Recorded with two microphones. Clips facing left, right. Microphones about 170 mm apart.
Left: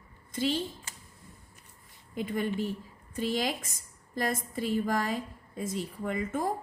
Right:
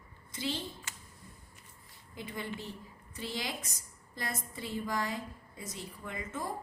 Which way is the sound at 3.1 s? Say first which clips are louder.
Left 9 dB; 50° left (ahead or behind).